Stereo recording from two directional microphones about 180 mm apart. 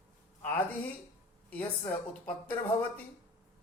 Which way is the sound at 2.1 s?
10° left (ahead or behind).